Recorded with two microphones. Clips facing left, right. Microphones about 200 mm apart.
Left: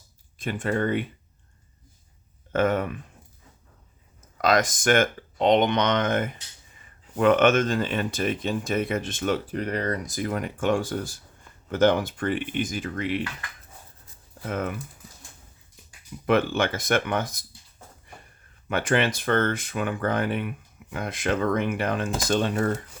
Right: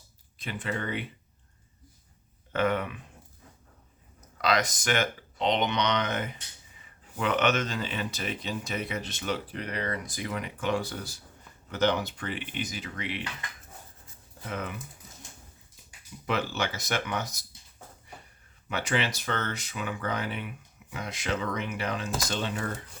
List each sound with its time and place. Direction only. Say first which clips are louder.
0.3 s speech: left 8 dB; 45° left (ahead or behind)
2.5 s speech: left 4 dB; 45° left (ahead or behind)
4.4 s speech: left 5 dB; 45° left (ahead or behind)
14.4 s speech: left 6 dB; 50° left (ahead or behind)
16.2 s speech: left 8 dB; 55° left (ahead or behind)
18.7 s speech: left 6 dB; 50° left (ahead or behind)